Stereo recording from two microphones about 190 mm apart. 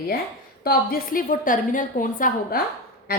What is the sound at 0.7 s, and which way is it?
A woman's voice, 50° left (ahead or behind).